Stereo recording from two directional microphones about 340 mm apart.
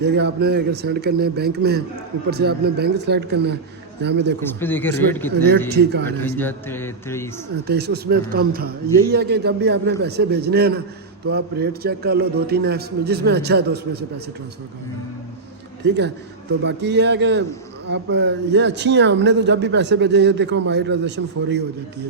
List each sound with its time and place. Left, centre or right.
0.0 s a man's voice: right
4.6 s speech: centre
5.7 s a man's voice: right
6.1 s a man's voice: centre
7.7 s a man's voice: right
15.8 s a man's voice: right